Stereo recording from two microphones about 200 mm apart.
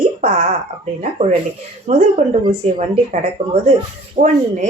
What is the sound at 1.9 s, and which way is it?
Speech, 30° right (ahead or behind).